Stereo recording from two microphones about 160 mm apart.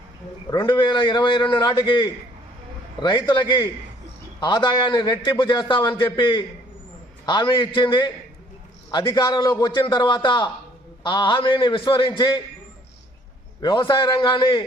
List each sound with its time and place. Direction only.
0.5 s a man's voice: 30° left (ahead or behind)
13.6 s a man's voice: 30° left (ahead or behind)